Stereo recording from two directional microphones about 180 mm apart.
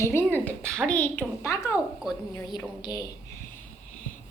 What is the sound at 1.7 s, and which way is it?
Speech, centre (ahead or behind).